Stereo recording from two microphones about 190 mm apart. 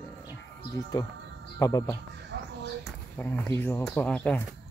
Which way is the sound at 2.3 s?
70° right (ahead or behind).